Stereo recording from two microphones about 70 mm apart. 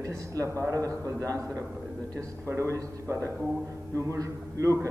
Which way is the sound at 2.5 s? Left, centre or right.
Right.